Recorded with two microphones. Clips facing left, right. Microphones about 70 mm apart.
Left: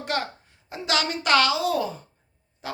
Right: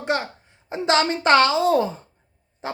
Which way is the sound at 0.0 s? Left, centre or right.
Right.